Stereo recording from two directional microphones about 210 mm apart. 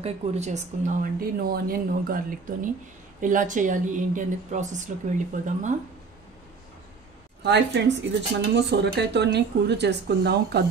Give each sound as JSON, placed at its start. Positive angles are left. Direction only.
{"t": 0.0, "sound": "speech", "side_deg": -35}
{"t": 7.4, "sound": "speech", "side_deg": -55}